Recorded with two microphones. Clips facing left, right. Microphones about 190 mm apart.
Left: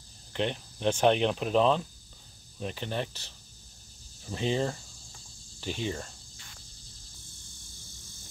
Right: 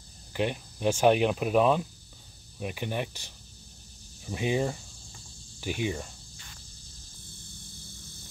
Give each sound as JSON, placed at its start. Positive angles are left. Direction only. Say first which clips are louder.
{"t": 0.3, "sound": "speech", "louder": "right 1 dB", "side_deg": -10}